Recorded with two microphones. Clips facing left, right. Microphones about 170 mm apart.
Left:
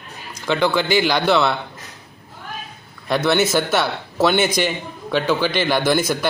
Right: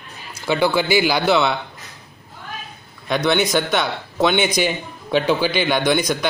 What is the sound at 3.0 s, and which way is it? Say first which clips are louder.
A man's voice: left 1 dB; 5° left (ahead or behind).